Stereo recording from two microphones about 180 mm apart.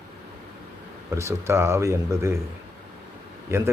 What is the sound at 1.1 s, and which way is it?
Speech, 15° right (ahead or behind).